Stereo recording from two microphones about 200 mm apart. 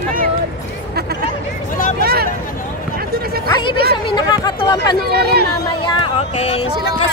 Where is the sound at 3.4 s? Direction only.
25° left (ahead or behind).